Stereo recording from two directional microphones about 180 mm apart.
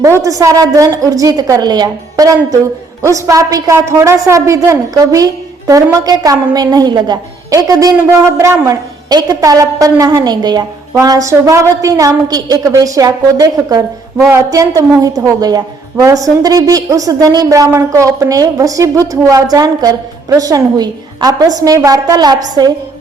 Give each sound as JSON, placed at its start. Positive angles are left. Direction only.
{"t": 0.0, "sound": "a woman's voice", "side_deg": -15}